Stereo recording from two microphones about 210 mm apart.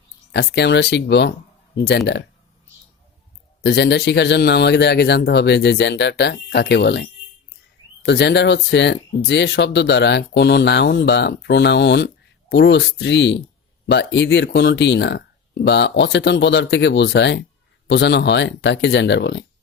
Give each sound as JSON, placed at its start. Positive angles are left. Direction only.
{"t": 0.3, "sound": "speech", "side_deg": 55}
{"t": 3.6, "sound": "speech", "side_deg": 55}